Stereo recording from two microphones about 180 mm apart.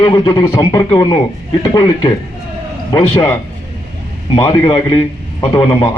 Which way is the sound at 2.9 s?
20° left (ahead or behind).